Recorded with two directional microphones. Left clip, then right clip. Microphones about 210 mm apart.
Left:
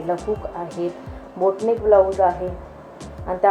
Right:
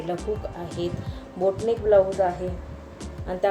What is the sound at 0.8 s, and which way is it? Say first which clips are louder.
Speech: left 3 dB; 30° left (ahead or behind).